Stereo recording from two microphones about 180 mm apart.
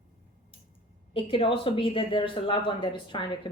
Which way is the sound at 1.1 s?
30° left (ahead or behind).